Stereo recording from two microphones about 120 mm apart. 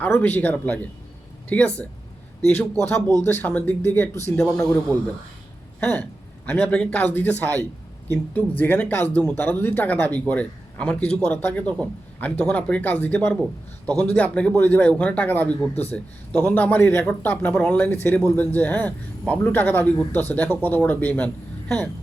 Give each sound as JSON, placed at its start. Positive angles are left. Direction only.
{"t": 0.0, "sound": "a man's voice", "side_deg": 15}
{"t": 3.2, "sound": "a man's voice", "side_deg": 15}